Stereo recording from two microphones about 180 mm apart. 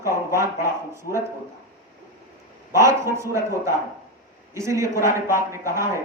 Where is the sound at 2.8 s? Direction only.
15° right (ahead or behind).